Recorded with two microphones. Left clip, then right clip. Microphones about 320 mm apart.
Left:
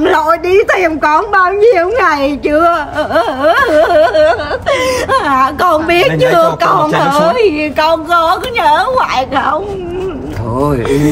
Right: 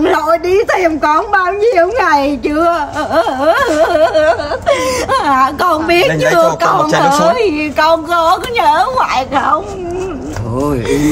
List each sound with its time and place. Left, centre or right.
0.0 s a woman's voice: centre